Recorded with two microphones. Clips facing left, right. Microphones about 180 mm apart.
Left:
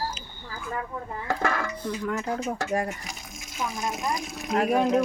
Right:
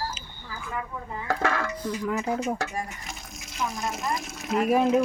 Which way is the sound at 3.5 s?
Centre (ahead or behind).